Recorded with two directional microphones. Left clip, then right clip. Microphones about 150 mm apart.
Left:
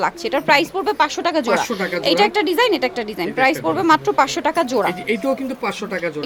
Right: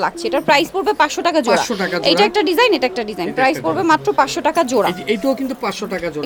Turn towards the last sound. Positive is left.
turn(degrees=-20)  # may be behind; listen again after turning